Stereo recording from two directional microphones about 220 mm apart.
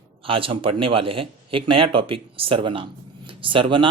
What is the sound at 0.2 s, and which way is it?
Speech, 25° right (ahead or behind).